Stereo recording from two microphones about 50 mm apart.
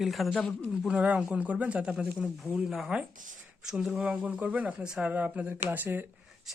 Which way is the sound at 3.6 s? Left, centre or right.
Centre.